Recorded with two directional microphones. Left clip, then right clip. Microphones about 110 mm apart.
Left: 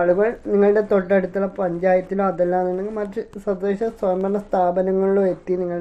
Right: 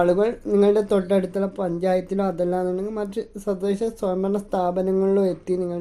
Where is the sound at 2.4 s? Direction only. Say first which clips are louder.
Left 3 dB; 20° right (ahead or behind).